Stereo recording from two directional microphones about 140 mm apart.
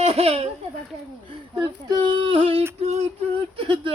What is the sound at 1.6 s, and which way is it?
Speech, 35° right (ahead or behind).